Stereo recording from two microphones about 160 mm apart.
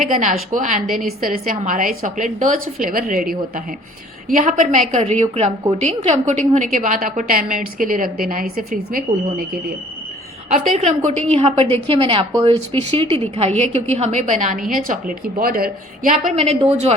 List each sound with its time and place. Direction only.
0.0 s a woman's voice: 55° right (ahead or behind)
10.8 s a woman's voice: 45° right (ahead or behind); by 16.1 s 65° right (ahead or behind)
16.3 s a woman's voice: 40° right (ahead or behind)